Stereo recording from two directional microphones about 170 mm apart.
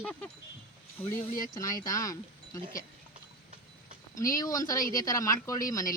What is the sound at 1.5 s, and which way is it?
Speech, 20° left (ahead or behind).